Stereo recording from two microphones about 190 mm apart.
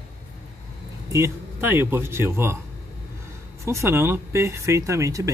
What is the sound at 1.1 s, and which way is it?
Speech, 15° right (ahead or behind).